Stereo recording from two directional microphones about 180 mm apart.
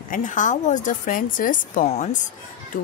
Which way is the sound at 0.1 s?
45° left (ahead or behind).